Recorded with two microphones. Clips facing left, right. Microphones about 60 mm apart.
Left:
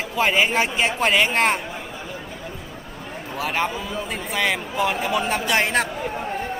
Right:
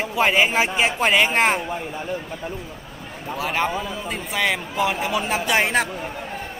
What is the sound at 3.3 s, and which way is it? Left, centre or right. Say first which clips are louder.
A man's voice: right 1 dB; centre.